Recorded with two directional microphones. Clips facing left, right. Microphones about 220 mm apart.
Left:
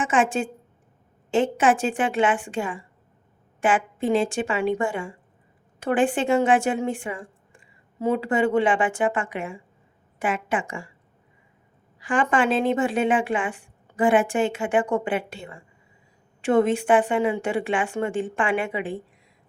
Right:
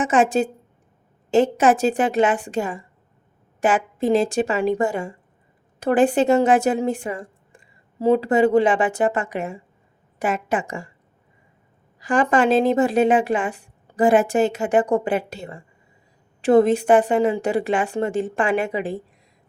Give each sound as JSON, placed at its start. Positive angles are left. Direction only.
{"t": 0.0, "sound": "a woman's voice", "side_deg": -40}
{"t": 11.9, "sound": "a woman's voice", "side_deg": -40}